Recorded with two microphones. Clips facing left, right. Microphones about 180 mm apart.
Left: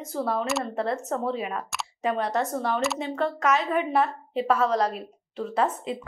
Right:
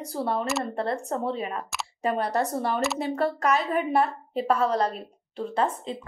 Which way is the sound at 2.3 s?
35° right (ahead or behind).